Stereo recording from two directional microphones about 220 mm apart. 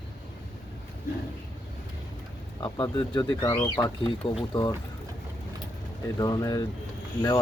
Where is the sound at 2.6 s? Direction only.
20° left (ahead or behind).